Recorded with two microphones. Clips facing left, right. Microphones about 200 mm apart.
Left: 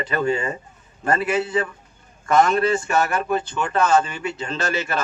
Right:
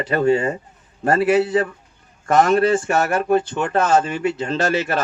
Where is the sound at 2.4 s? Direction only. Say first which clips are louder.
Right 3 dB; 50° right (ahead or behind).